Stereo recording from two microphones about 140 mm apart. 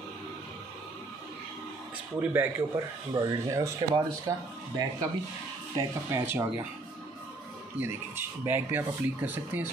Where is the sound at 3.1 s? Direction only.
25° right (ahead or behind).